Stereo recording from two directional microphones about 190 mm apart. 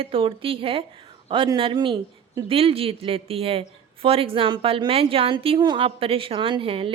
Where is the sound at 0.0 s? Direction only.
30° right (ahead or behind).